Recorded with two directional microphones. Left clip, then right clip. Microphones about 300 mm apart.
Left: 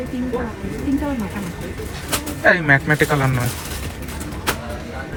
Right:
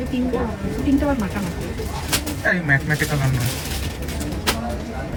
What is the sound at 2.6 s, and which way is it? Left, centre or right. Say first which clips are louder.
Speech: left 5 dB; centre.